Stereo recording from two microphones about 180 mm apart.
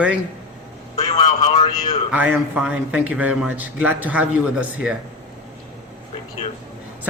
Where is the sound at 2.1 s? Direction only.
10° right (ahead or behind).